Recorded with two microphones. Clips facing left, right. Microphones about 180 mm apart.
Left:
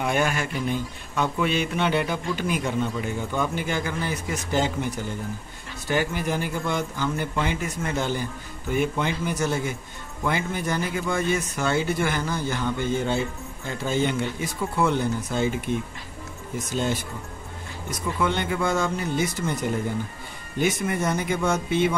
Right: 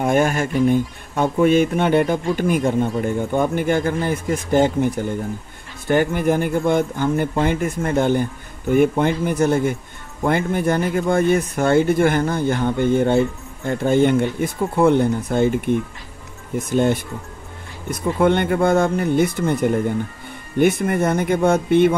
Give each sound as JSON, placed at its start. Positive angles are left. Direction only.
{"t": 0.0, "sound": "speech", "side_deg": -45}